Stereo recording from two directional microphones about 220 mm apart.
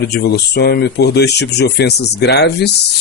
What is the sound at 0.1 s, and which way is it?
Speech, 45° left (ahead or behind).